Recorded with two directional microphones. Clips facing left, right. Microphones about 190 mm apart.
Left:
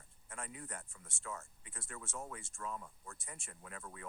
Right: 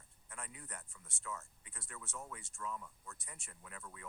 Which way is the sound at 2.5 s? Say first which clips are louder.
Even; 50° left (ahead or behind).